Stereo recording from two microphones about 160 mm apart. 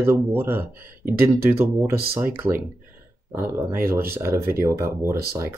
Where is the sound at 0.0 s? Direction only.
15° right (ahead or behind).